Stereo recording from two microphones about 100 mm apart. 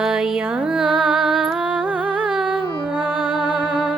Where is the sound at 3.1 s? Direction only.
50° left (ahead or behind).